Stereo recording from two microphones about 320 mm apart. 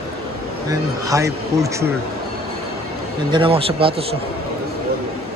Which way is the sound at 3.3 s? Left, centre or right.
Centre.